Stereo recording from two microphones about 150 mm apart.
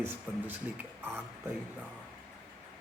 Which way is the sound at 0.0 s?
15° right (ahead or behind).